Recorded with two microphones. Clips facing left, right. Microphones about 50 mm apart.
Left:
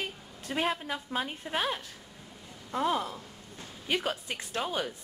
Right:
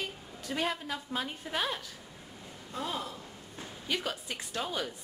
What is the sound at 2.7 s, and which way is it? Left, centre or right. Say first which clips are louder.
Speech: left 7 dB; left.